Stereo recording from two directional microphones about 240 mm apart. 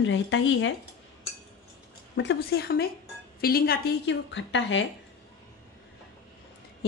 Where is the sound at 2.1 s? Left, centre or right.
Left.